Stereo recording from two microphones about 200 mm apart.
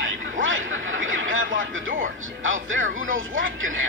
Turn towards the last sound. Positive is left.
turn(degrees=-80)